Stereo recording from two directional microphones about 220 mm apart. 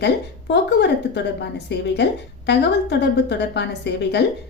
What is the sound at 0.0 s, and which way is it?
A woman's voice, 50° left (ahead or behind).